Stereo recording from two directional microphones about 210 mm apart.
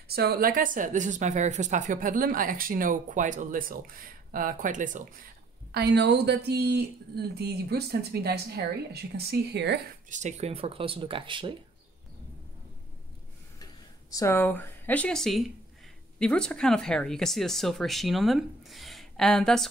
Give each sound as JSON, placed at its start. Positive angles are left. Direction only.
{"t": 0.1, "sound": "speech", "side_deg": -50}
{"t": 5.7, "sound": "speech", "side_deg": -50}
{"t": 10.0, "sound": "speech", "side_deg": -35}
{"t": 14.1, "sound": "speech", "side_deg": 10}